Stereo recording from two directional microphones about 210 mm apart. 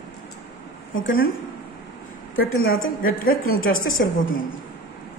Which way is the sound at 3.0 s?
45° left (ahead or behind).